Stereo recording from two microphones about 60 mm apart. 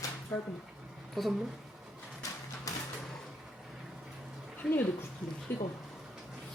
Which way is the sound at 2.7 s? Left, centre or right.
Left.